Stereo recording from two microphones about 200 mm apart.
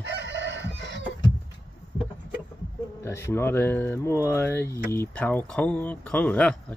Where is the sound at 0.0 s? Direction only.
60° right (ahead or behind).